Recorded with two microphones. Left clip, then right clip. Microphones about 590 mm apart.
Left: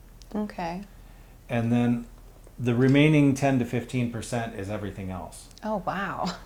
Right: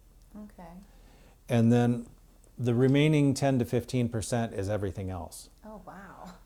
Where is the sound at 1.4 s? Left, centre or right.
Right.